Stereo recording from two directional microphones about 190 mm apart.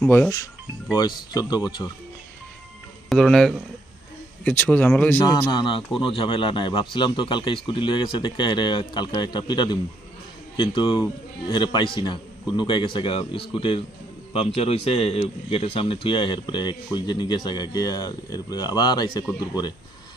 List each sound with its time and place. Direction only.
0.0 s speech: 5° left (ahead or behind)
0.9 s speech: 20° left (ahead or behind)
3.1 s speech: centre (ahead or behind)
5.2 s a man's voice: 20° left (ahead or behind)